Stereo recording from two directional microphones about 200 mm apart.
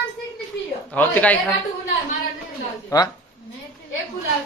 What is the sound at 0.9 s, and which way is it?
Speech, 10° left (ahead or behind).